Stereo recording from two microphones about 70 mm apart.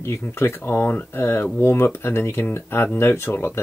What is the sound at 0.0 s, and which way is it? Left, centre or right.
Speech, left.